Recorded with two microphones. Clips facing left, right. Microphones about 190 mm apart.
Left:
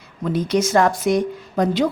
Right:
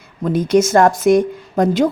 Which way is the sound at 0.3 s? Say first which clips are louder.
Right 5 dB; 50° right (ahead or behind).